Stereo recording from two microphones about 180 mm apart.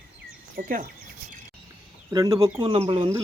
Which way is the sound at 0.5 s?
50° right (ahead or behind).